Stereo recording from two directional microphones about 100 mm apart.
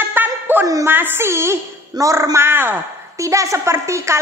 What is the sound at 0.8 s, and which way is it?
A woman's voice, 20° right (ahead or behind).